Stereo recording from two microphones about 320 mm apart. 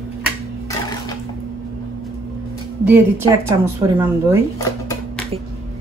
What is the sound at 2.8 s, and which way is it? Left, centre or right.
Speech, centre.